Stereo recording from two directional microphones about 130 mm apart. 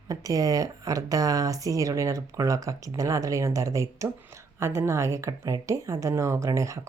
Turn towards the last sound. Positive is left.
turn(degrees=-25)  # may be behind; listen again after turning